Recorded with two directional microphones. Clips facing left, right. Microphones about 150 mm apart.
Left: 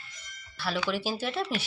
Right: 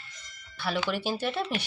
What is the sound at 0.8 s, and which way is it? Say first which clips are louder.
Speech: right 1 dB; 5° left (ahead or behind).